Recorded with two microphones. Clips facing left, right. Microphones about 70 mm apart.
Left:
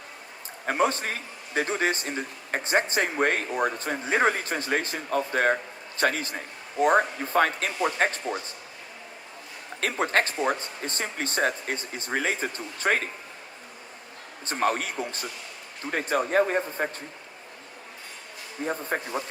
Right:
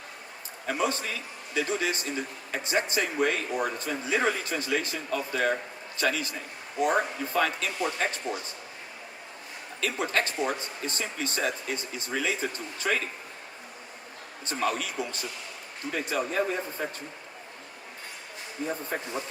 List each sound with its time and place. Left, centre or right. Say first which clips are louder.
0.6 s speech: left 4 dB; left
9.8 s speech: left 3 dB; left
14.5 s speech: left 3 dB; left
18.6 s speech: left 3 dB; left